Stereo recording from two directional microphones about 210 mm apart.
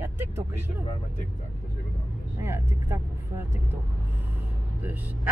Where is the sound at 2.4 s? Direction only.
10° right (ahead or behind).